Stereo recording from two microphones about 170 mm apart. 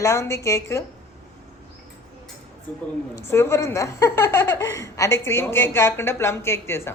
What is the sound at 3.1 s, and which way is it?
Speech, 15° left (ahead or behind).